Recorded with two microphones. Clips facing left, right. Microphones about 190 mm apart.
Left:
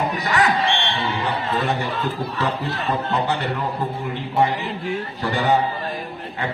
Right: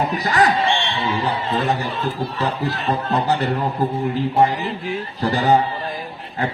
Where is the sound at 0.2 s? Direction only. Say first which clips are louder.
Right 3 dB; 35° right (ahead or behind).